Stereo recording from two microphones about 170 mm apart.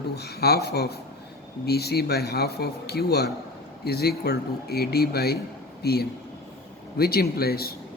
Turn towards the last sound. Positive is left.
turn(degrees=65)  # may be behind; listen again after turning